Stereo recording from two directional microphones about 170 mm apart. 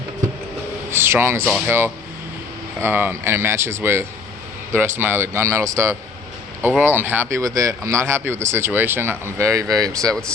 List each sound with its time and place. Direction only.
0.9 s speech: 15° right (ahead or behind)